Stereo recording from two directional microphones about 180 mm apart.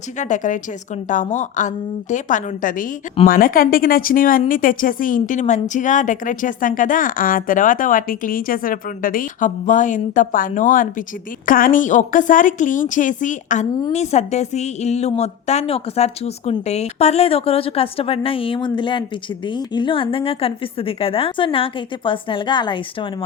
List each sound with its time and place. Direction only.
0.2 s a woman's voice: 45° left (ahead or behind); by 23.0 s 25° left (ahead or behind)